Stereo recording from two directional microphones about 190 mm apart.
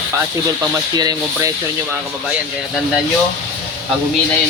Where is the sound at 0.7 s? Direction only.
20° right (ahead or behind).